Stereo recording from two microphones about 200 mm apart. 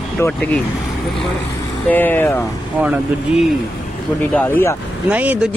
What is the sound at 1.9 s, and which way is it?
Speech, 10° left (ahead or behind).